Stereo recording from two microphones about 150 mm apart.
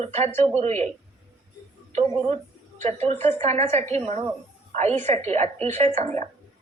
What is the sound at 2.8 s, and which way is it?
A woman's voice, 45° right (ahead or behind).